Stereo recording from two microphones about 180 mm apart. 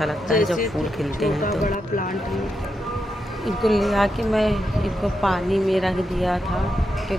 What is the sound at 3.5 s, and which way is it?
Speech, centre (ahead or behind).